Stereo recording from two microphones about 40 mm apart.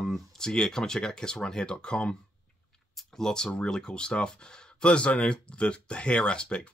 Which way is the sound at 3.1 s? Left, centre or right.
Centre.